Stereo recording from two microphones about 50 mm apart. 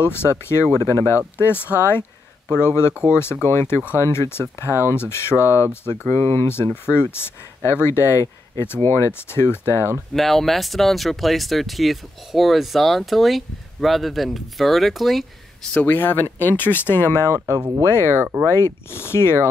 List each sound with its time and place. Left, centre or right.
0.0 s speech: left
1.8 s speech: left
2.9 s speech: right
3.4 s speech: left
10.1 s speech: centre
15.8 s speech: left
17.3 s speech: right
18.0 s speech: right
18.5 s speech: left